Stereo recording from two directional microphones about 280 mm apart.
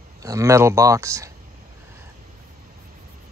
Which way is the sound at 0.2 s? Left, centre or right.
Centre.